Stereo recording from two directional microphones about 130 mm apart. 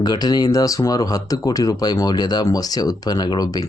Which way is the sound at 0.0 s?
30° left (ahead or behind).